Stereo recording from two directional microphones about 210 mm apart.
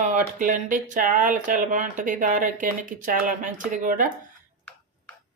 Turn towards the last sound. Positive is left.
turn(degrees=-40)  # may be behind; listen again after turning